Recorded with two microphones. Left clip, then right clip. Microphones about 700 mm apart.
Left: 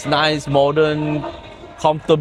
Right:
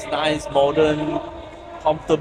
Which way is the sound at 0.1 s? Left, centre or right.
Left.